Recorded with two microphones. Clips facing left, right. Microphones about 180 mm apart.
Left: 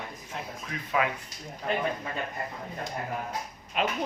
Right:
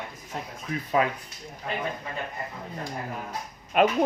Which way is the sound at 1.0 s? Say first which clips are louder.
Right 3 dB; 35° right (ahead or behind).